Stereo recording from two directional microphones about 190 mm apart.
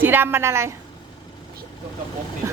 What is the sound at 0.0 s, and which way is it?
Speech, 10° right (ahead or behind).